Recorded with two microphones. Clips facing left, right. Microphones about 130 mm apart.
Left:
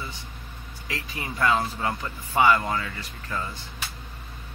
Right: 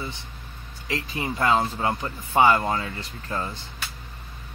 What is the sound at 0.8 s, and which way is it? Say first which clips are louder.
Speech: right 5 dB; 25° right (ahead or behind).